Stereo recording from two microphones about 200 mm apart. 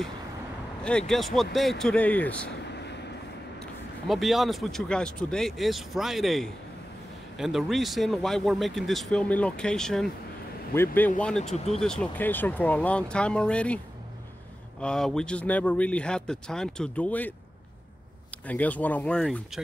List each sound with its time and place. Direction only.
0.8 s speech: 5° left (ahead or behind)
2.6 s vehicle: 55° left (ahead or behind)
4.1 s speech: centre (ahead or behind)
11.4 s speech: 35° left (ahead or behind)
11.8 s speech: 5° left (ahead or behind)
14.8 s speech: 5° left (ahead or behind)
18.5 s speech: 5° left (ahead or behind)